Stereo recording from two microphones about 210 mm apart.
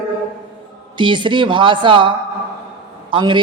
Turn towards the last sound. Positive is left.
turn(degrees=-25)  # may be behind; listen again after turning